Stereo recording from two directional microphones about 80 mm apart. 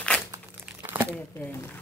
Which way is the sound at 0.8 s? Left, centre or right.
Right.